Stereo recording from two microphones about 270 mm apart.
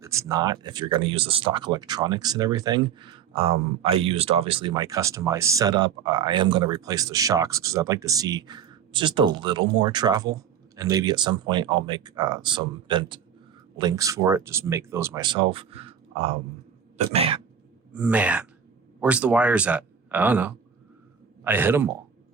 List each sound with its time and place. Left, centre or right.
0.0 s speech: centre
17.9 s speech: centre